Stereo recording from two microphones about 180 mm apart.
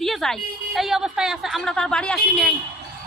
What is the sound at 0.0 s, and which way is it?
A woman's voice, centre (ahead or behind).